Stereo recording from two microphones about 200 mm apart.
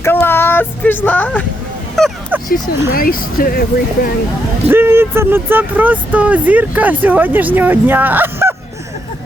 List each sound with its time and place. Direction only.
0.0 s a sound: 10° left (ahead or behind)
2.9 s speech: 45° left (ahead or behind)
4.7 s speech: 10° right (ahead or behind)